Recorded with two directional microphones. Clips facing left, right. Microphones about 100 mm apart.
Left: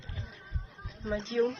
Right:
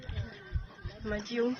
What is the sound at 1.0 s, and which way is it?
Speech, 20° left (ahead or behind).